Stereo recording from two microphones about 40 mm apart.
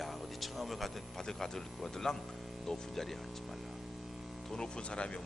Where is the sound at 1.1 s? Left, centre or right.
Centre.